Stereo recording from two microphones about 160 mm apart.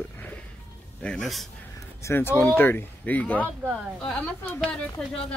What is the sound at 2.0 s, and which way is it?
Speech, 15° left (ahead or behind).